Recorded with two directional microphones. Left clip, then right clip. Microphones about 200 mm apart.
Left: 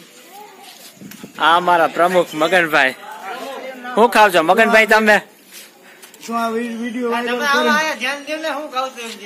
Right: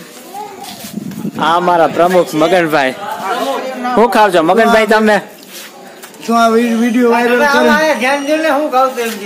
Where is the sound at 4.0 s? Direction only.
Centre (ahead or behind).